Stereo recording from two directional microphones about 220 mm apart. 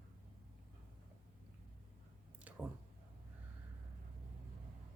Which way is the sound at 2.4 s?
5° right (ahead or behind).